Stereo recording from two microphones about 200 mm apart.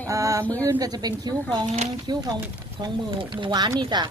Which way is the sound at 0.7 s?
20° right (ahead or behind).